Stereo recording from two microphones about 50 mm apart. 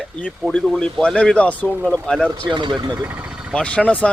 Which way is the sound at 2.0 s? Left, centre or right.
Centre.